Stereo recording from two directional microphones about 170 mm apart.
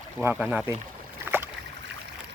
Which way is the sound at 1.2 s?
15° right (ahead or behind).